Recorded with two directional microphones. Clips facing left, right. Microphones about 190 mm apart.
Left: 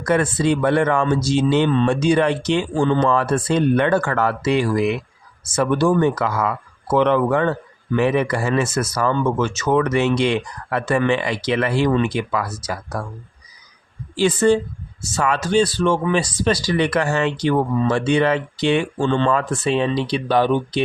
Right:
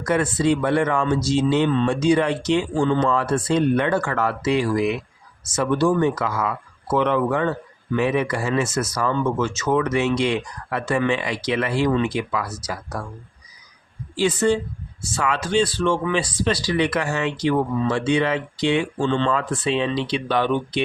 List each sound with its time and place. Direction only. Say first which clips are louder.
0.1 s speech: left 2 dB; 60° left (ahead or behind)
6.9 s speech: left 3 dB; 70° left (ahead or behind)
15.0 s speech: left 3 dB; 40° left (ahead or behind)